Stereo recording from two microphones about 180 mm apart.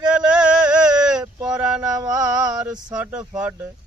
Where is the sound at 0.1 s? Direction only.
5° right (ahead or behind).